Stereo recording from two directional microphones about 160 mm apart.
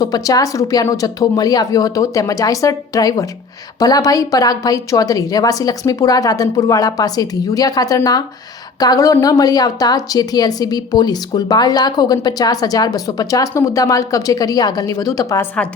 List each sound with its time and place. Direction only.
0.0 s a woman's voice: 25° left (ahead or behind)